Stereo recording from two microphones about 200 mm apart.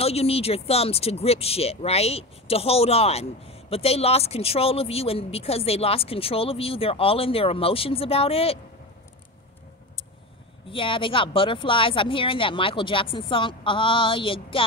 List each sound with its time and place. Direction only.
0.0 s speech: 30° left (ahead or behind)
10.7 s speech: 25° left (ahead or behind)